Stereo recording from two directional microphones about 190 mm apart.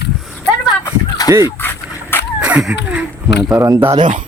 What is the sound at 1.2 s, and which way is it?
Dog, 20° left (ahead or behind).